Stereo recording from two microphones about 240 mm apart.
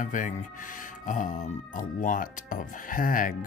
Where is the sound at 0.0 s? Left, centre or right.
Left.